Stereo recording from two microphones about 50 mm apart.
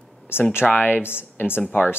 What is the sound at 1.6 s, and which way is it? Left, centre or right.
Speech, left.